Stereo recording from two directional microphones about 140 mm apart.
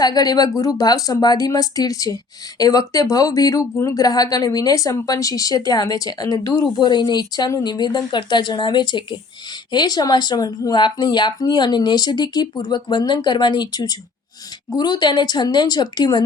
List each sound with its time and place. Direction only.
0.0 s speech: 30° left (ahead or behind)